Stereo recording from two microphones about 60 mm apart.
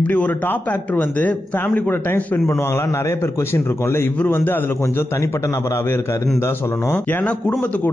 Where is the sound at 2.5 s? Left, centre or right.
Left.